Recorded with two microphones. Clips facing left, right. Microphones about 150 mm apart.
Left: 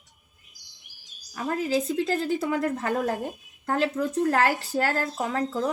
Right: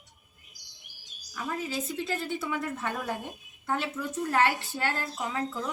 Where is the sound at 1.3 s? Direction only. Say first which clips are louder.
Left 7 dB; 35° left (ahead or behind).